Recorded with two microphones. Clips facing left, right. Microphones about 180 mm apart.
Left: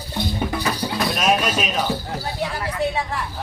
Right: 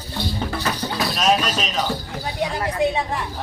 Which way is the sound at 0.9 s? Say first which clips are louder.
Right 1 dB; centre (ahead or behind).